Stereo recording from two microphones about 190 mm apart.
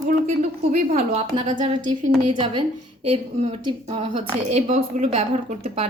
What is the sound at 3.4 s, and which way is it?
Speech, 30° right (ahead or behind).